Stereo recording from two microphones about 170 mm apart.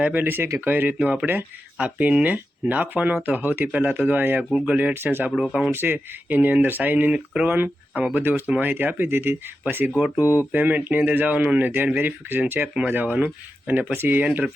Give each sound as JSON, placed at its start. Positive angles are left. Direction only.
{"t": 0.0, "sound": "speech", "side_deg": -10}
{"t": 10.2, "sound": "speech", "side_deg": 15}
{"t": 10.5, "sound": "speech", "side_deg": -10}